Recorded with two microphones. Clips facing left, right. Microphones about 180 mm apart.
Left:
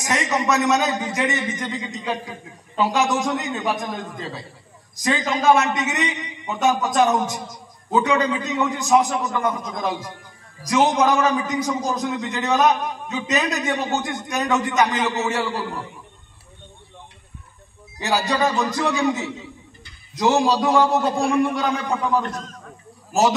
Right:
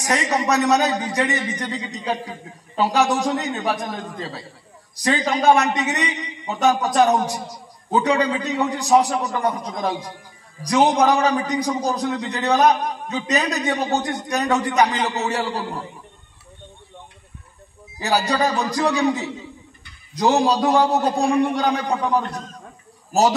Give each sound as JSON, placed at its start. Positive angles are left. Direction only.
{"t": 0.0, "sound": "a man's voice", "side_deg": -35}
{"t": 18.0, "sound": "a man's voice", "side_deg": -35}